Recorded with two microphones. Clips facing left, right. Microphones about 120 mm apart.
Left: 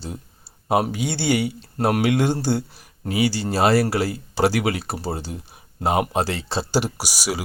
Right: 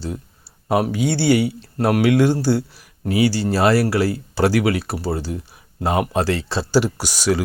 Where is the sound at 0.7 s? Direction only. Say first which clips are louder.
Right 2 dB; 20° left (ahead or behind).